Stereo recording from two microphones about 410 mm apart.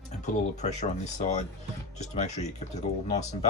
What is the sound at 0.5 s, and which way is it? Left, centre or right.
Speech, centre.